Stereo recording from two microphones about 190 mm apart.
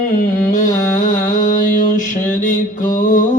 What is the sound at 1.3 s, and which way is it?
Mantra, 45° left (ahead or behind).